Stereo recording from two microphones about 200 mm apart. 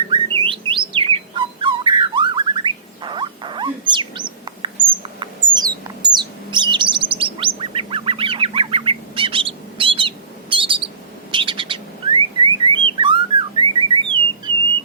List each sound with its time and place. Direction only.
0.1 s bird: 25° right (ahead or behind)